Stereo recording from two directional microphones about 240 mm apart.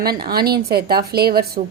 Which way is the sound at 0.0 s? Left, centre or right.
Right.